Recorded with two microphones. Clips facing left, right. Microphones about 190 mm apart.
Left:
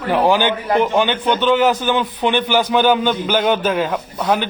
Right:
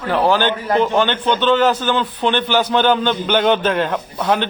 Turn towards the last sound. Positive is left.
turn(degrees=5)  # may be behind; listen again after turning